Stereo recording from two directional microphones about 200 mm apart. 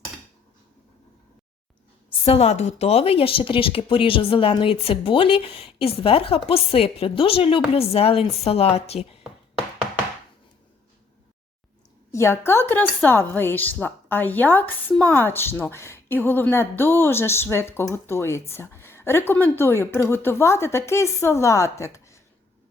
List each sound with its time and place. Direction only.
2.2 s speech: 30° left (ahead or behind)
12.1 s a woman's voice: 15° left (ahead or behind)
21.9 s a sound: 15° left (ahead or behind)